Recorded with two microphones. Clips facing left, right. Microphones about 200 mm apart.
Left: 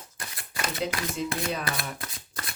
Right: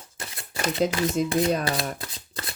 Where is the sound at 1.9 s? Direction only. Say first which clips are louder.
Right 2 dB; 25° right (ahead or behind).